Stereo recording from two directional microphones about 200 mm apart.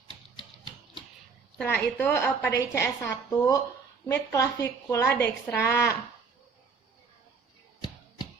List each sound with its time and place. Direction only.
1.5 s a woman's voice: 10° left (ahead or behind)